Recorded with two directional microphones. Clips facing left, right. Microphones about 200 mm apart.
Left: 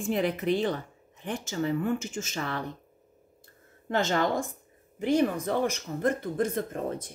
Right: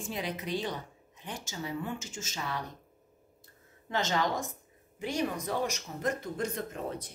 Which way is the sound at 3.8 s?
50° left (ahead or behind).